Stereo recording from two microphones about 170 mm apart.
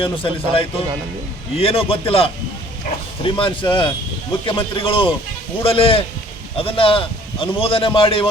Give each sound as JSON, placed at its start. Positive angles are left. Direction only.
{"t": 0.0, "sound": "a man's voice", "side_deg": 30}